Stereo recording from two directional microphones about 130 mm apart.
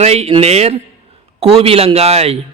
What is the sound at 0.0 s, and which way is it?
A man's voice, 55° right (ahead or behind).